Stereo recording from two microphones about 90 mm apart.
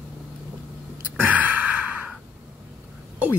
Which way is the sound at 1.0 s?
15° right (ahead or behind).